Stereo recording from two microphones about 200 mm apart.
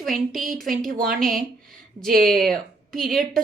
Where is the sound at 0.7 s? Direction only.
45° right (ahead or behind).